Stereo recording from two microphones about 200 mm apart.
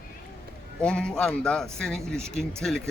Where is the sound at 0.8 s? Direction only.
5° left (ahead or behind).